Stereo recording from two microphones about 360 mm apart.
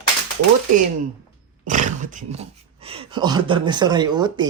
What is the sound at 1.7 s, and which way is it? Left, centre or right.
Speech, right.